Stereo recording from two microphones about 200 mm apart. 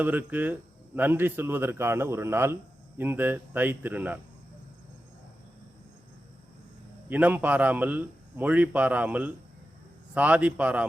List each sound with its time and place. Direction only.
0.0 s a man's voice: 10° right (ahead or behind)
7.1 s a man's voice: 10° right (ahead or behind)